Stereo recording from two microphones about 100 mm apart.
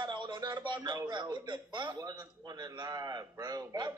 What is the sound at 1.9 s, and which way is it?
A man's voice, 35° right (ahead or behind).